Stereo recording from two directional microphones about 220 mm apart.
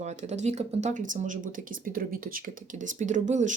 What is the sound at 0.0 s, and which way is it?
Speech, 30° right (ahead or behind).